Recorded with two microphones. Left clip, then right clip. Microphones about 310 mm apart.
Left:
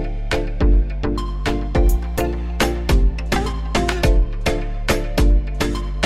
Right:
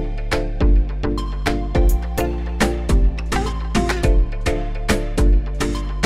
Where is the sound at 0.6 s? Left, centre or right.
Centre.